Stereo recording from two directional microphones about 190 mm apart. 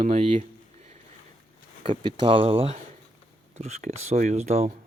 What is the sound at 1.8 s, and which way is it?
Speech, 25° right (ahead or behind).